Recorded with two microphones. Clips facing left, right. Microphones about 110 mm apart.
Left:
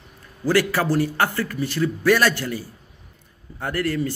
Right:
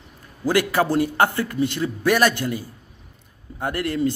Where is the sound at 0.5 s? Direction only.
15° right (ahead or behind).